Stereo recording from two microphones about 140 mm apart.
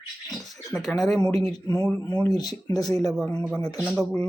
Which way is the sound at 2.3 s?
30° left (ahead or behind).